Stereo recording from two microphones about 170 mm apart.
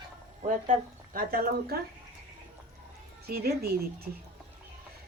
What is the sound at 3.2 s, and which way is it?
Speech, 65° right (ahead or behind).